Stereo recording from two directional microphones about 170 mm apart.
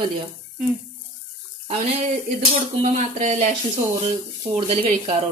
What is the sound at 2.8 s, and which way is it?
Speech, 45° right (ahead or behind).